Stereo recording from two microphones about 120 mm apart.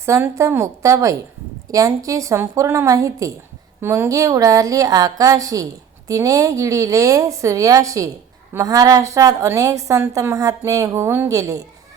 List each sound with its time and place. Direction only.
0.0 s a woman's voice: 25° right (ahead or behind)